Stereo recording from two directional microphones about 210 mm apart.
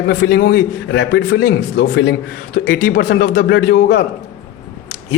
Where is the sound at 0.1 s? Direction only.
55° left (ahead or behind).